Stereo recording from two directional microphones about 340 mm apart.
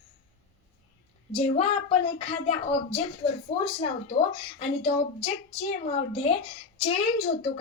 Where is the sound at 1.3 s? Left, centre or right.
Centre.